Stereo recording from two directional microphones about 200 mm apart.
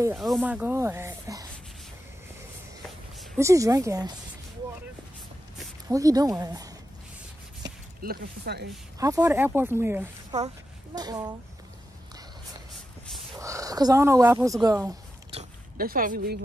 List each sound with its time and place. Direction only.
0.2 s speech: 5° right (ahead or behind)
3.3 s speech: 15° right (ahead or behind)
5.9 s speech: 15° right (ahead or behind)
7.6 s speech: 50° right (ahead or behind)
9.0 s a child's voice: 15° right (ahead or behind)
13.4 s speech: 15° right (ahead or behind)
15.8 s speech: 45° right (ahead or behind)